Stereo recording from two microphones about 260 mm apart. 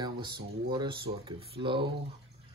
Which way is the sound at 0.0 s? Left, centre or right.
Centre.